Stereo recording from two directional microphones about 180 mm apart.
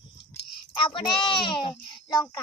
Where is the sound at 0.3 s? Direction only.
30° left (ahead or behind).